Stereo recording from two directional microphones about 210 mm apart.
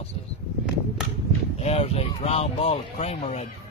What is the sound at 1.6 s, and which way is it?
Speech, 30° left (ahead or behind).